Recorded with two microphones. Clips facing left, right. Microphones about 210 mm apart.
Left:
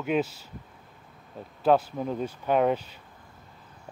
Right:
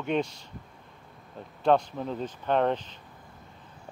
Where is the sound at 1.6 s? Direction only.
5° left (ahead or behind).